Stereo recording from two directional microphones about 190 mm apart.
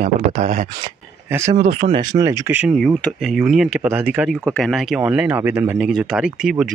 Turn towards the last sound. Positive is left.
turn(degrees=-5)  # may be behind; listen again after turning